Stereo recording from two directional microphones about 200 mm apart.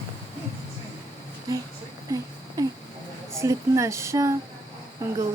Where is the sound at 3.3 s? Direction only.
15° right (ahead or behind).